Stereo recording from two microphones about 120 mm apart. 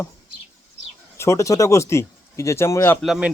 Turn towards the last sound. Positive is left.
turn(degrees=-5)  # may be behind; listen again after turning